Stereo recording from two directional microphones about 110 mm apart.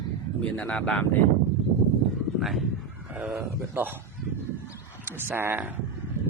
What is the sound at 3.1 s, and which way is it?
Speech, 10° right (ahead or behind).